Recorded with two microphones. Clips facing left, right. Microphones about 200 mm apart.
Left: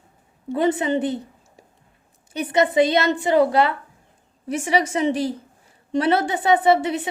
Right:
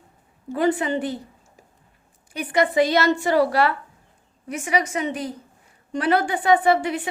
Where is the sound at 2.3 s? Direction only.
25° left (ahead or behind).